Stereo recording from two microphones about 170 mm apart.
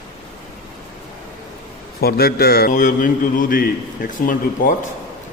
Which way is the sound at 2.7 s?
50° left (ahead or behind).